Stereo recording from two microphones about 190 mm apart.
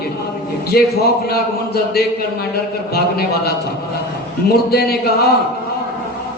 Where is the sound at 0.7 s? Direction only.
55° left (ahead or behind).